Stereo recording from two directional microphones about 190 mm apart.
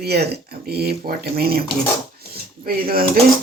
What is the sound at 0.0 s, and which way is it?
Speech, 55° right (ahead or behind).